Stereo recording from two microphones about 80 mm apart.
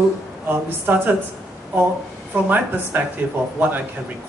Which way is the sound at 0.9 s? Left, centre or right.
Right.